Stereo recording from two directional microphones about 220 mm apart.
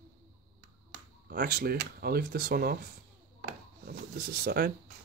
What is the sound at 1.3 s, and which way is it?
Speech, 45° right (ahead or behind).